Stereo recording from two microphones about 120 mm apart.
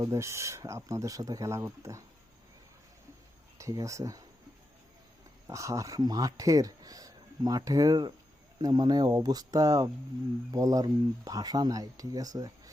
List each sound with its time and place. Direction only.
0.0 s speech: 25° right (ahead or behind)
3.6 s speech: 25° right (ahead or behind)
5.5 s speech: 25° right (ahead or behind)